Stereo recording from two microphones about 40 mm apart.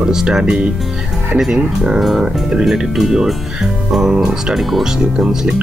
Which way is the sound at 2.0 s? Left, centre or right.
Centre.